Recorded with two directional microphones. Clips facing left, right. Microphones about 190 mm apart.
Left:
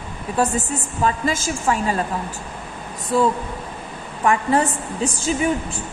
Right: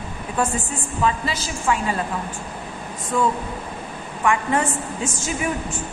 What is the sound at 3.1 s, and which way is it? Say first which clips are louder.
A woman's voice: left 3 dB; 35° left (ahead or behind).